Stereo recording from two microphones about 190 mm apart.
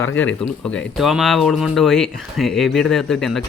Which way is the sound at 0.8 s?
Centre (ahead or behind).